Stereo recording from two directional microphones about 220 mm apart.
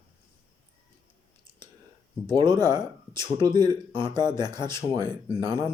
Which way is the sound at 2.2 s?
20° right (ahead or behind).